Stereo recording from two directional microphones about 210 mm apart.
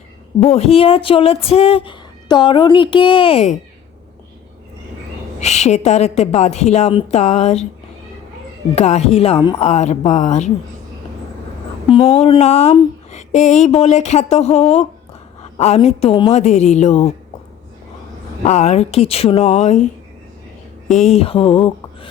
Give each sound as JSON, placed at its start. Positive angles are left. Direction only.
{"t": 0.3, "sound": "speech", "side_deg": 30}
{"t": 5.4, "sound": "speech", "side_deg": 30}
{"t": 8.7, "sound": "speech", "side_deg": 30}
{"t": 11.9, "sound": "speech", "side_deg": 25}
{"t": 18.4, "sound": "speech", "side_deg": 35}
{"t": 20.9, "sound": "speech", "side_deg": 30}